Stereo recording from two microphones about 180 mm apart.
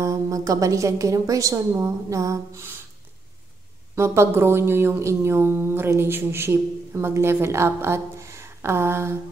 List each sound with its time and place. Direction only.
0.0 s speech: 20° right (ahead or behind)
3.9 s speech: 15° right (ahead or behind)